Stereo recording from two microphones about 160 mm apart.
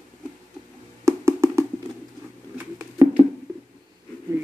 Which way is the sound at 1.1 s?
15° right (ahead or behind).